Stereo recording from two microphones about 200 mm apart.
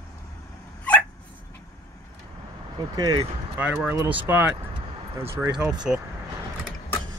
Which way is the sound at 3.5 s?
5° right (ahead or behind).